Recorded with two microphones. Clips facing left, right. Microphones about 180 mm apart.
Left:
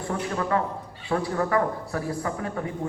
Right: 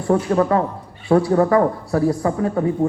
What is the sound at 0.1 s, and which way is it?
A woman's voice, 45° right (ahead or behind).